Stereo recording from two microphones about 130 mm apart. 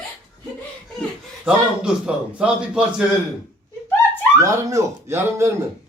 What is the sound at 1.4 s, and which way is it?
A man's voice, 5° right (ahead or behind).